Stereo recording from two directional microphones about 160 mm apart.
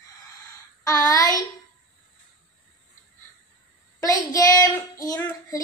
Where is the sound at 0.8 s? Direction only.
20° left (ahead or behind).